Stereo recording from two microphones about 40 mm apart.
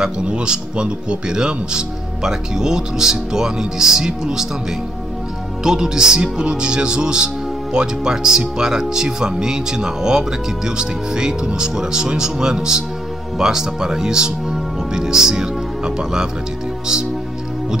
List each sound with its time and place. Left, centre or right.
0.0 s speech: right